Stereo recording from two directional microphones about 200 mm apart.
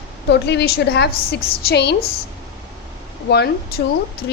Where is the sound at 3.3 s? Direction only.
55° left (ahead or behind).